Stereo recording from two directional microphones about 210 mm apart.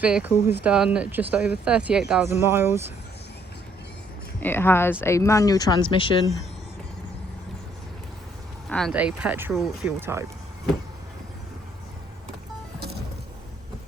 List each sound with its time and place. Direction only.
0.0 s speech: 5° right (ahead or behind)
4.4 s speech: 10° left (ahead or behind)
8.9 s speech: 5° right (ahead or behind)
10.1 s speech: 10° right (ahead or behind)